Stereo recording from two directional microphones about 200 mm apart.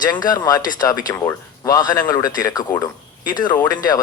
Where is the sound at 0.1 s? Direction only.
20° left (ahead or behind).